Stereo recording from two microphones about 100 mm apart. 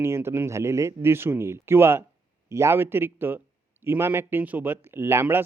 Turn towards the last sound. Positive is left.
turn(degrees=-25)  # may be behind; listen again after turning